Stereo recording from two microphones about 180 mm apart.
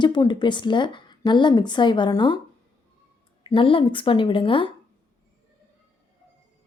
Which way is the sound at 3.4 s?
30° left (ahead or behind).